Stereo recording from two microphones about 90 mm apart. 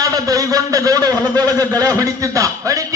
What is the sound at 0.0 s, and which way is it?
A man's voice, 40° right (ahead or behind).